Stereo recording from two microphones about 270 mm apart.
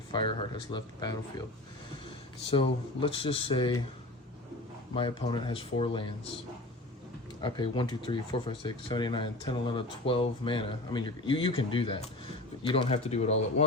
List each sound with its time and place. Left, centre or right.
0.1 s speech: centre
2.5 s speech: centre
4.9 s speech: centre
7.4 s speech: centre